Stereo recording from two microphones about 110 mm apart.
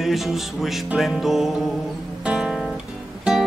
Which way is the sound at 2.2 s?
10° right (ahead or behind).